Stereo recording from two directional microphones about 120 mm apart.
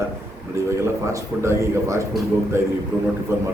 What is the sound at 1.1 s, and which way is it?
A man's voice, 25° right (ahead or behind).